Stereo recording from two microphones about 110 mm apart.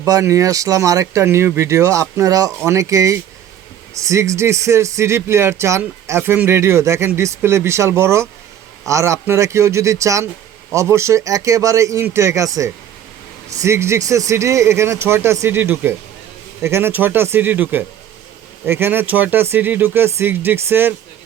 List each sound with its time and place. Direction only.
0.0 s speech: 30° right (ahead or behind)